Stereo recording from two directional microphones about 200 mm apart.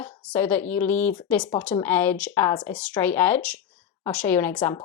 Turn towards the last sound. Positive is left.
turn(degrees=10)  # may be behind; listen again after turning